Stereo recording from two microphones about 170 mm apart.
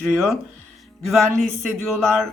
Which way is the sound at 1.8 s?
Centre (ahead or behind).